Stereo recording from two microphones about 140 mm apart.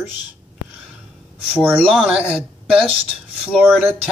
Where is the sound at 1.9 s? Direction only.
5° right (ahead or behind).